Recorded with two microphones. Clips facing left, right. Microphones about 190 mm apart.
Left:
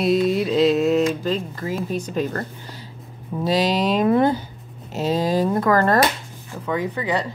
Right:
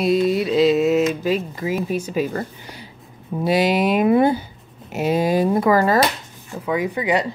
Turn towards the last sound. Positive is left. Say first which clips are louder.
# right 3 dB
turn(degrees=-15)  # may be behind; listen again after turning